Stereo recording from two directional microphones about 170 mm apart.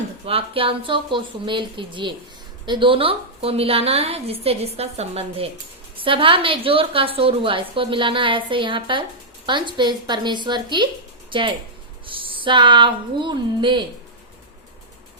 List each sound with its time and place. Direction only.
0.3 s a woman's voice: 35° right (ahead or behind)